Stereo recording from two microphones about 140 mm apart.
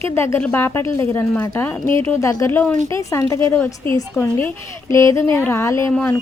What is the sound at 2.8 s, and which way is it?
A woman's voice, 25° left (ahead or behind).